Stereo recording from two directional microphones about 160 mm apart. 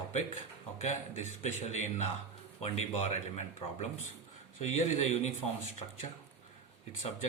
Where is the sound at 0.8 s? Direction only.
45° left (ahead or behind).